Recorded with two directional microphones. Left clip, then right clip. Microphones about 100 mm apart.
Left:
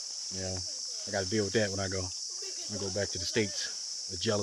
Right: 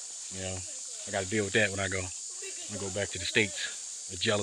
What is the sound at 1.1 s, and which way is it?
Speech, 20° left (ahead or behind).